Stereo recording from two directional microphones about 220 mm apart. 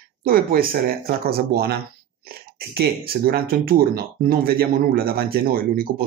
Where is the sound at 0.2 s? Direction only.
40° right (ahead or behind).